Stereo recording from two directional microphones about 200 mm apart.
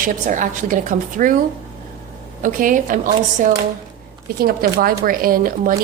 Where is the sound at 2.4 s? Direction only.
40° right (ahead or behind).